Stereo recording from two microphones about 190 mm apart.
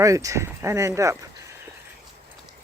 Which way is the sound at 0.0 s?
15° right (ahead or behind).